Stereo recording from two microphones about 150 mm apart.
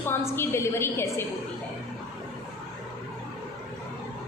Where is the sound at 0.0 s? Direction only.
15° left (ahead or behind).